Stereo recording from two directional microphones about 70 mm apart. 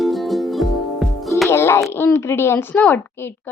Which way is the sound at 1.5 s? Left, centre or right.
Left.